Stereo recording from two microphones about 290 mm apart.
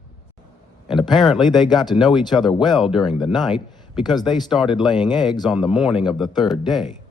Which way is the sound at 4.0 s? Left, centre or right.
Centre.